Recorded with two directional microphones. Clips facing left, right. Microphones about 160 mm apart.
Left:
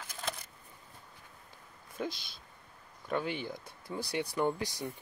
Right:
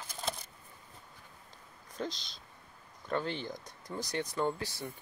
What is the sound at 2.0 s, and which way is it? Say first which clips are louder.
Speech: left 1 dB; 10° left (ahead or behind).